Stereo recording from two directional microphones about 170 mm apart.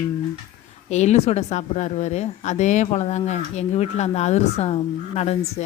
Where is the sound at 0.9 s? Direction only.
40° left (ahead or behind).